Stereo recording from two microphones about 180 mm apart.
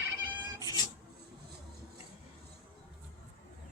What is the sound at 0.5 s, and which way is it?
Cat, 20° left (ahead or behind).